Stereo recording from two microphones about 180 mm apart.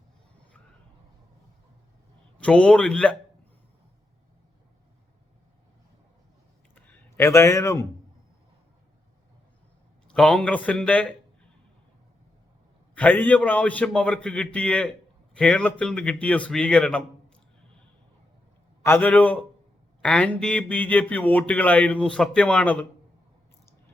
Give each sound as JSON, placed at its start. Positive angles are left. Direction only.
{"t": 2.4, "sound": "a man's voice", "side_deg": 5}
{"t": 6.7, "sound": "a sound", "side_deg": 10}
{"t": 10.1, "sound": "a man's voice", "side_deg": 5}
{"t": 12.9, "sound": "a man's voice", "side_deg": 10}
{"t": 18.8, "sound": "a man's voice", "side_deg": 10}